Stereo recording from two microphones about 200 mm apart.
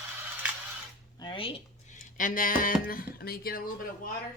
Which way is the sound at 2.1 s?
40° left (ahead or behind).